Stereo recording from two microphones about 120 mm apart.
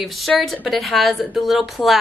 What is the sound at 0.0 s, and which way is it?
A woman's voice, centre (ahead or behind).